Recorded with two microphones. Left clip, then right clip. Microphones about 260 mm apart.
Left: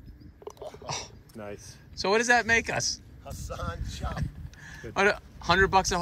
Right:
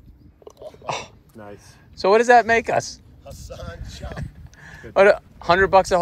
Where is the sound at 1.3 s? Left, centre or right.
Right.